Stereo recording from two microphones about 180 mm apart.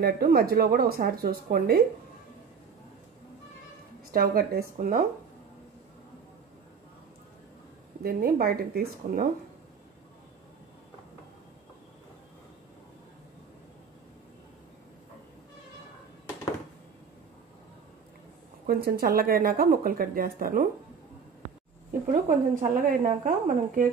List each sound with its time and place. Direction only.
0.0 s speech: 55° right (ahead or behind)
4.1 s a woman's voice: 55° right (ahead or behind)
8.0 s speech: 55° right (ahead or behind)
18.7 s speech: 60° right (ahead or behind)
22.0 s a woman's voice: 45° right (ahead or behind)